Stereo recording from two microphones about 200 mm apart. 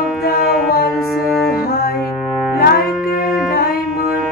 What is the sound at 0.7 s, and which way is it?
Music, 50° left (ahead or behind).